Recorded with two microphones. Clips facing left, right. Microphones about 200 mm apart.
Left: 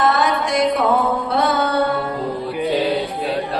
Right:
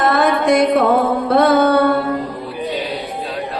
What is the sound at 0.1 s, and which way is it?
Music, 55° right (ahead or behind).